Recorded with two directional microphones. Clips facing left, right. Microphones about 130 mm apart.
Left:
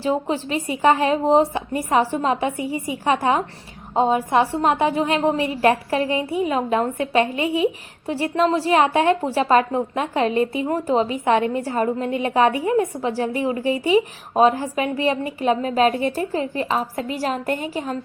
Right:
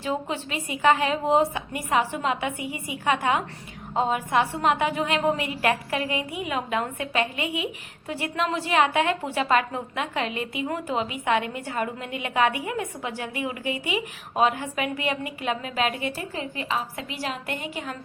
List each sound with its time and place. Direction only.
0.0 s a woman's voice: 35° left (ahead or behind)